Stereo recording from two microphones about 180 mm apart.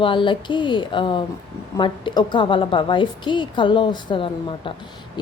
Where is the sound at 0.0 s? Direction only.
25° left (ahead or behind).